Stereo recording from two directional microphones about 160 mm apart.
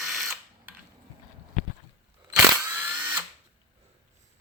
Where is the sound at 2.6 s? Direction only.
10° right (ahead or behind).